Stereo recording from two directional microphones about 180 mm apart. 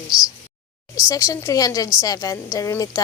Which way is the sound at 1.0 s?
20° left (ahead or behind).